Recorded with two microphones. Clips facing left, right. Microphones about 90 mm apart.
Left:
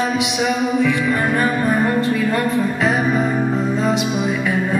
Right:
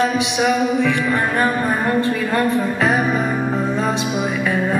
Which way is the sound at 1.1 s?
20° right (ahead or behind).